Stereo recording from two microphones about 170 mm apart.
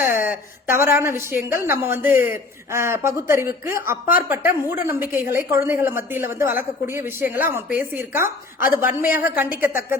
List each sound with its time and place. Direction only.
0.0 s a woman's voice: 15° right (ahead or behind)